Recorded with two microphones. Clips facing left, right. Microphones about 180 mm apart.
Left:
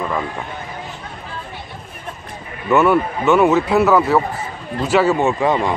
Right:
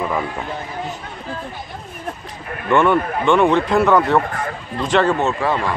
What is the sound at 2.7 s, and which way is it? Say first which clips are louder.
Speech: left 1 dB; 5° left (ahead or behind).